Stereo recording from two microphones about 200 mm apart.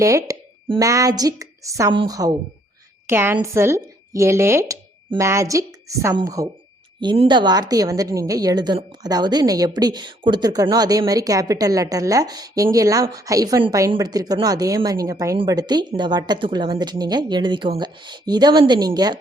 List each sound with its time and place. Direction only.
0.0 s a woman's voice: 15° right (ahead or behind)